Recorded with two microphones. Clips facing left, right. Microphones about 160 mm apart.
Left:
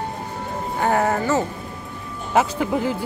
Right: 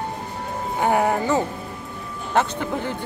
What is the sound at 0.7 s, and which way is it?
Speech, 15° right (ahead or behind).